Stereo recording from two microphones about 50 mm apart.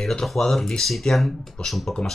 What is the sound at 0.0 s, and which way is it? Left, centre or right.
Speech, centre.